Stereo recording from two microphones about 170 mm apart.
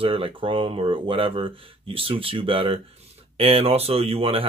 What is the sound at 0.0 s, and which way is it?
Speech, 30° right (ahead or behind).